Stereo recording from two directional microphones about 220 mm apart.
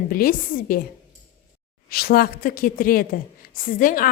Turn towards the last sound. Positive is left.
turn(degrees=40)  # may be behind; listen again after turning